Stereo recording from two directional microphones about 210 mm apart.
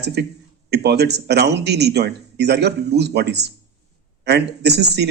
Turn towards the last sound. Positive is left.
turn(degrees=-50)  # may be behind; listen again after turning